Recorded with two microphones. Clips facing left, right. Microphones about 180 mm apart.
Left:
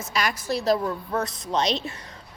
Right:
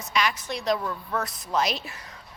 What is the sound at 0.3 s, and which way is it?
Speech, 5° left (ahead or behind).